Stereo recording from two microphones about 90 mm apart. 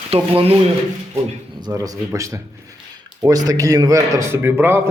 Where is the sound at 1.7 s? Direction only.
40° right (ahead or behind).